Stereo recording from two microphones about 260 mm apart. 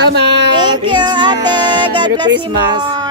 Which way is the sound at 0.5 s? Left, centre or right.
Centre.